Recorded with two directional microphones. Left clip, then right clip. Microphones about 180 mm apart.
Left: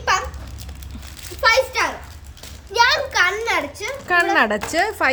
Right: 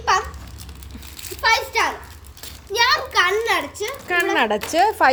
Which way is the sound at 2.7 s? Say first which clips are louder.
Left 1 dB; 25° left (ahead or behind).